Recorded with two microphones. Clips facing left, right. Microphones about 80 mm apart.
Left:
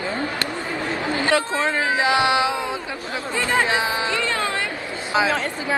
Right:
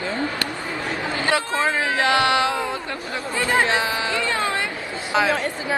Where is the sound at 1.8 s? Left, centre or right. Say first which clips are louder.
Left 1 dB; centre.